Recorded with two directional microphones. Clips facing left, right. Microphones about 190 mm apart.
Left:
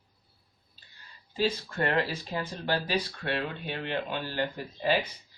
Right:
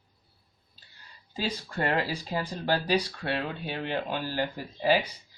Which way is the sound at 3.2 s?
40° right (ahead or behind).